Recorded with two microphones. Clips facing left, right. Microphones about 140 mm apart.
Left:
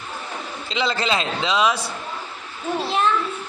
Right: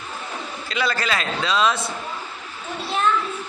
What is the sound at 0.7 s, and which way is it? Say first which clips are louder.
A man's voice: left 2 dB; 20° left (ahead or behind).